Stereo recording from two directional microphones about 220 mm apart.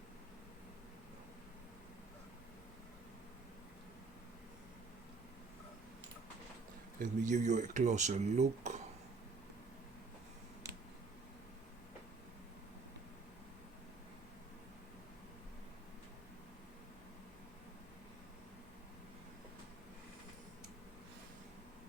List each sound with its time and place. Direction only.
7.0 s speech: 35° right (ahead or behind)